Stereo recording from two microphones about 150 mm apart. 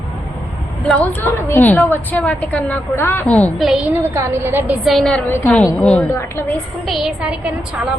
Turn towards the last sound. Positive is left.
turn(degrees=-5)  # may be behind; listen again after turning